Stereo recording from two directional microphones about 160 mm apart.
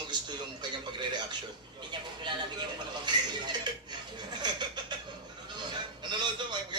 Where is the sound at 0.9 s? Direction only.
30° right (ahead or behind).